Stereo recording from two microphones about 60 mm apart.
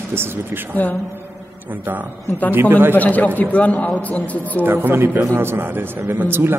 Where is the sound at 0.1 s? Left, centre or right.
Right.